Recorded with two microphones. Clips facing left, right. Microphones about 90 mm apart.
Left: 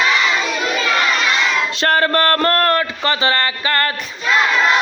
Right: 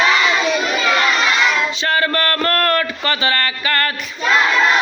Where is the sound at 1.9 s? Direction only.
35° left (ahead or behind).